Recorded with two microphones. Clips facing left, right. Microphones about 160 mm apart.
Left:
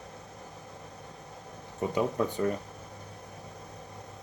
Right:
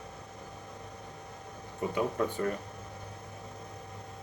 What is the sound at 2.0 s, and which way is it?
Speech, 20° left (ahead or behind).